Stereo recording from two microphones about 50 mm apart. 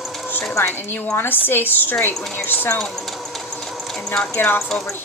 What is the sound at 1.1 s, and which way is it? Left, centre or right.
Speech, left.